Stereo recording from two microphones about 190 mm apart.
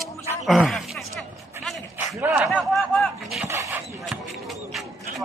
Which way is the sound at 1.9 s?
10° right (ahead or behind).